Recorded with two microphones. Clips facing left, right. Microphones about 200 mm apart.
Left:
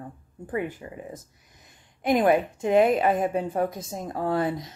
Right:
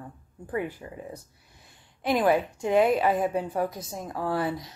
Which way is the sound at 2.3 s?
20° left (ahead or behind).